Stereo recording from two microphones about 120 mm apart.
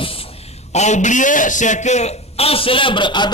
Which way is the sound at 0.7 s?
80° left.